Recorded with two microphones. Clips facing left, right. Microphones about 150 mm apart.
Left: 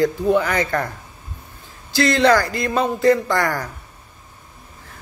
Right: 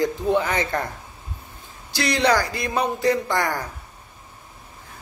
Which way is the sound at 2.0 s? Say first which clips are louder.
Left 5 dB; 15° right (ahead or behind).